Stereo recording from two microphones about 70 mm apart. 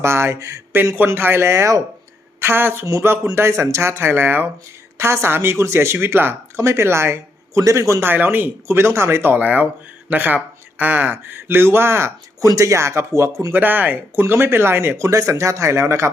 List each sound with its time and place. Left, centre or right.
0.0 s speech: right
0.9 s speech: right
2.4 s a woman's voice: right
8.0 s speech: right
13.5 s speech: right